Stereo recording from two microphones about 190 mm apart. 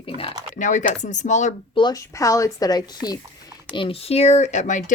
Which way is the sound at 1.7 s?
20° left (ahead or behind).